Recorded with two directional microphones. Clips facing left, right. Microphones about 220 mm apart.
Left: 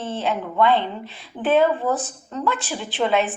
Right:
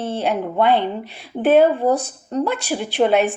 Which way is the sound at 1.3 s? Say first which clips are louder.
Right 4 dB; 40° right (ahead or behind).